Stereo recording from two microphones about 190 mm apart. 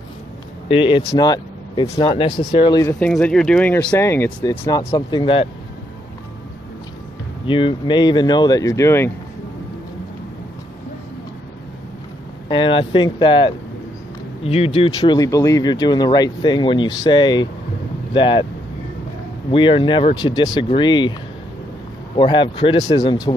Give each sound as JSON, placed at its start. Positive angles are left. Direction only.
{"t": 0.7, "sound": "speech", "side_deg": 25}
{"t": 3.1, "sound": "speech", "side_deg": 5}
{"t": 7.4, "sound": "speech", "side_deg": 25}
{"t": 12.4, "sound": "speech", "side_deg": 25}
{"t": 14.9, "sound": "speech", "side_deg": 20}
{"t": 19.5, "sound": "speech", "side_deg": 25}
{"t": 22.1, "sound": "speech", "side_deg": 25}